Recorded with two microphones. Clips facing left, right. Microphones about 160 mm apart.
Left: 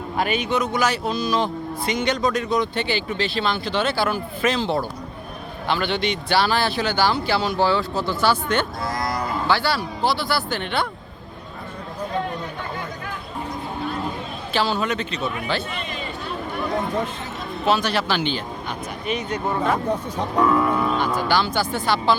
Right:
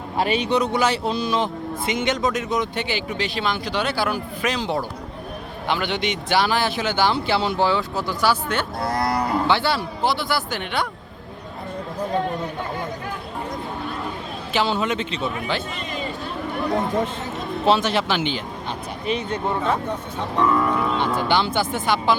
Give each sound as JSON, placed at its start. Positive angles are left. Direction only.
{"t": 0.2, "sound": "a man's voice", "side_deg": -30}
{"t": 8.8, "sound": "cattle", "side_deg": -65}
{"t": 9.5, "sound": "a man's voice", "side_deg": -20}
{"t": 14.5, "sound": "a man's voice", "side_deg": -20}
{"t": 17.7, "sound": "a man's voice", "side_deg": -20}
{"t": 19.0, "sound": "a man's voice", "side_deg": -30}
{"t": 19.5, "sound": "speech", "side_deg": 10}
{"t": 21.2, "sound": "a man's voice", "side_deg": -20}